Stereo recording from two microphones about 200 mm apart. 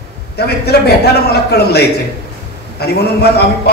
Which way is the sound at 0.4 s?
55° left (ahead or behind).